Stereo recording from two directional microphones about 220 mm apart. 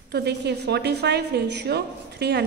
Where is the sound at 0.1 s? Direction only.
50° right (ahead or behind).